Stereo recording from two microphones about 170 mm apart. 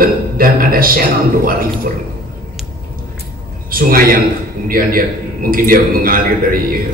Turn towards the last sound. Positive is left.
turn(degrees=-60)  # may be behind; listen again after turning